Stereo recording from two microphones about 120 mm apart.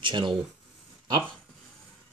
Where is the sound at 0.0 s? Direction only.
40° right (ahead or behind).